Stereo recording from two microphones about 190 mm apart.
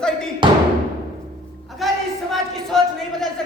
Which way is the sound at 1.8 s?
Centre (ahead or behind).